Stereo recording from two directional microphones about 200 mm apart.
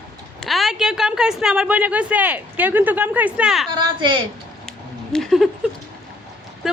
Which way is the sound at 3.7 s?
25° right (ahead or behind).